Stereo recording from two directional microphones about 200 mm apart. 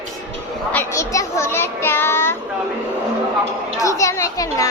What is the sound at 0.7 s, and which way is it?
A child's voice, 10° left (ahead or behind).